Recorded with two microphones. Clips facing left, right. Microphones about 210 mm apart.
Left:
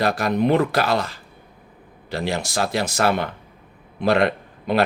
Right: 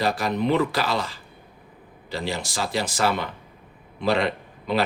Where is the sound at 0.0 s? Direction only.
65° left (ahead or behind).